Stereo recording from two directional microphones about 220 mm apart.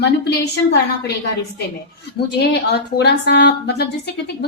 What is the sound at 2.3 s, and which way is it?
A woman's voice, 50° left (ahead or behind).